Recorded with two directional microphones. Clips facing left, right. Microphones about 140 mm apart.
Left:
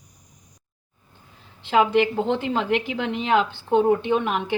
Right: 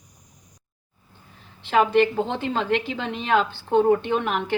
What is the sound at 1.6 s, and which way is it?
A woman's voice, 10° left (ahead or behind).